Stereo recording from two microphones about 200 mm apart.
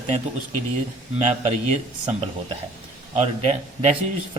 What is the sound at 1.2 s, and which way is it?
Speech, 35° right (ahead or behind).